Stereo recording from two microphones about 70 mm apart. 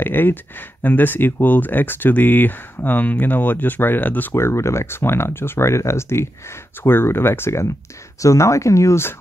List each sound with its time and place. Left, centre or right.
0.0 s speech: left
4.3 s speech: left